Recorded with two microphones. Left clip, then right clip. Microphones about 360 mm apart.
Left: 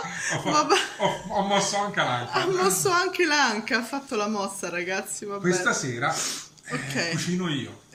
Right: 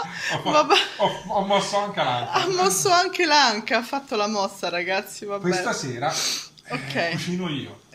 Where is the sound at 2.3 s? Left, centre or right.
Centre.